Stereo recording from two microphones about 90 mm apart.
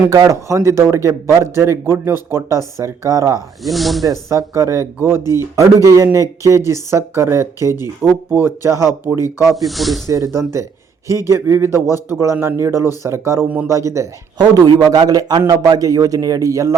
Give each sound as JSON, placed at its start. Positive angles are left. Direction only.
{"t": 0.3, "sound": "speech", "side_deg": -35}
{"t": 3.6, "sound": "speech", "side_deg": 0}
{"t": 4.0, "sound": "speech", "side_deg": -35}
{"t": 9.6, "sound": "speech", "side_deg": 0}
{"t": 10.1, "sound": "a man's voice", "side_deg": -35}